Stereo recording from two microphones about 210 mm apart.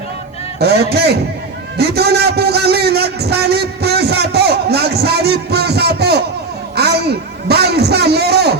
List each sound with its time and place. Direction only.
0.6 s a man's voice: 50° right (ahead or behind)